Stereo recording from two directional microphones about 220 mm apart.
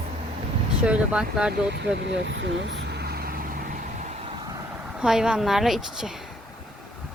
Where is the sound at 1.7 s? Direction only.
55° right (ahead or behind).